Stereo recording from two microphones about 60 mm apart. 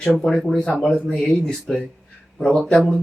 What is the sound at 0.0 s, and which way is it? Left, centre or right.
Speech, centre.